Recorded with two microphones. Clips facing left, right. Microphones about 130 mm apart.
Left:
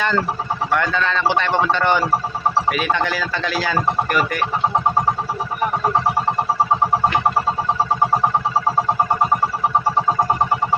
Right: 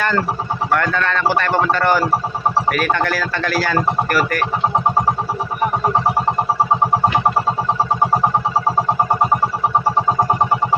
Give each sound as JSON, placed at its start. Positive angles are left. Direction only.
{"t": 1.3, "sound": "speech", "side_deg": 20}